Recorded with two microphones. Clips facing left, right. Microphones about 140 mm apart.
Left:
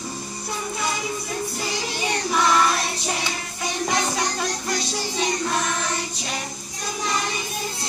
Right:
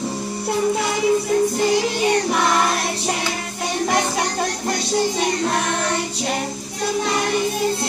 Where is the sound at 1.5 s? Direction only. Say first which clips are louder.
Right 10 dB; 55° right (ahead or behind).